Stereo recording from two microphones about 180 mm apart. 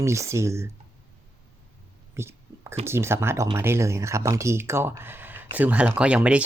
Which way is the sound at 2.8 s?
15° right (ahead or behind).